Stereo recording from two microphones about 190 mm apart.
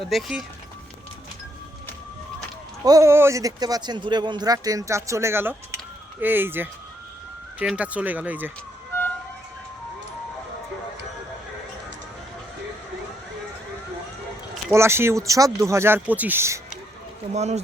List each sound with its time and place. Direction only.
0.0 s speech: centre (ahead or behind)
2.8 s speech: 15° right (ahead or behind)
14.7 s speech: 15° right (ahead or behind)
17.3 s speech: 35° right (ahead or behind)